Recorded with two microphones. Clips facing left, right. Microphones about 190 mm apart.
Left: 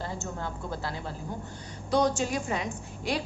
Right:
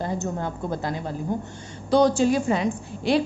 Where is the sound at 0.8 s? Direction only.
20° right (ahead or behind).